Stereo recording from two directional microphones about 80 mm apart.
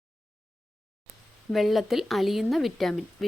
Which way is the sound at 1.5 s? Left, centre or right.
Centre.